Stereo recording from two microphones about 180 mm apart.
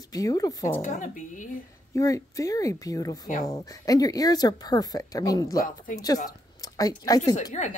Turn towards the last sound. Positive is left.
turn(degrees=40)  # may be behind; listen again after turning